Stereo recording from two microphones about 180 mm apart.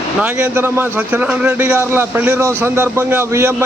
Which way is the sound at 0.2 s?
5° right (ahead or behind).